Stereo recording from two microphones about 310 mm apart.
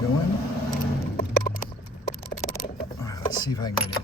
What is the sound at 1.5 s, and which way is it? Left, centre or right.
Horse, left.